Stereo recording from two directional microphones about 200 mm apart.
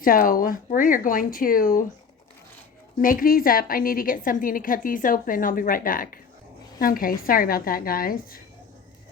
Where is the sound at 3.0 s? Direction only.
45° left (ahead or behind).